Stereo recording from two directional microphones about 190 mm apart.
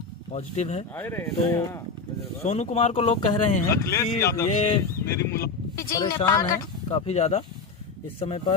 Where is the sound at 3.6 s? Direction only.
15° left (ahead or behind).